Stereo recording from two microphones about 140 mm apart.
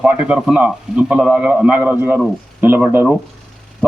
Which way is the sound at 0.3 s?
5° right (ahead or behind).